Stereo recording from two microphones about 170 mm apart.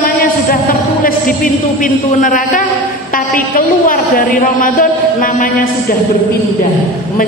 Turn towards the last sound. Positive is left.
turn(degrees=55)  # may be behind; listen again after turning